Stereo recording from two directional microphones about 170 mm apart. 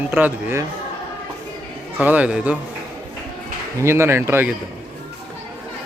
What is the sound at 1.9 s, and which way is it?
Speech, 10° right (ahead or behind).